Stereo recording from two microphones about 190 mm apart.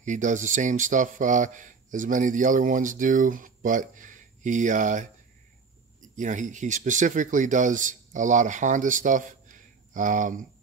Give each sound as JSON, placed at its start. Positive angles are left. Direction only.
{"t": 0.0, "sound": "speech", "side_deg": -40}
{"t": 6.1, "sound": "speech", "side_deg": -40}